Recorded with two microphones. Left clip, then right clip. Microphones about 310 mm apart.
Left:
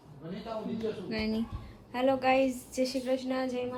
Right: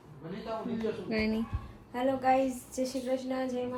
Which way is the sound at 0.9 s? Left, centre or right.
Centre.